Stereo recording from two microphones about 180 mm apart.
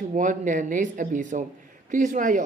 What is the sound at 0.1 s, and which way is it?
Speech, 45° right (ahead or behind).